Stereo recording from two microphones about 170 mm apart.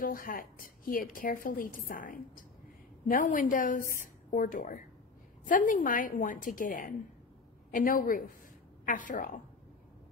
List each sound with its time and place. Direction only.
0.0 s a woman's voice: 55° left (ahead or behind)